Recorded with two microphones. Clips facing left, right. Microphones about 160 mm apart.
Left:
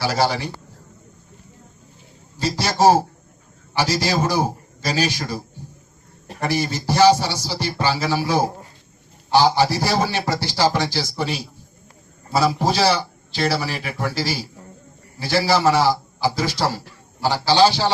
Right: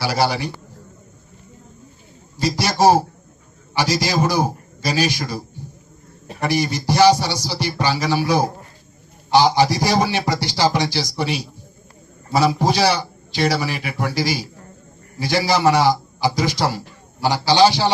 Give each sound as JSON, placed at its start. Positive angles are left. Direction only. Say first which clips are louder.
{"t": 0.0, "sound": "a man's voice", "louder": "right 1 dB", "side_deg": -15}
{"t": 2.4, "sound": "a man's voice", "louder": "right 1 dB", "side_deg": -10}
{"t": 6.4, "sound": "a man's voice", "louder": "right 2 dB", "side_deg": -15}